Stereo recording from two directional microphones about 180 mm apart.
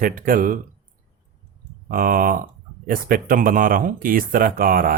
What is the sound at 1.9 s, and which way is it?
Speech, 50° right (ahead or behind).